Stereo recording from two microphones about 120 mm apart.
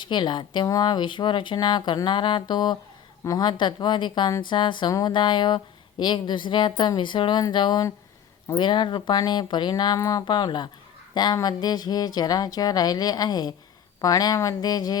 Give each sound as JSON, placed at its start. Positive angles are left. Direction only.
{"t": 0.0, "sound": "speech", "side_deg": 40}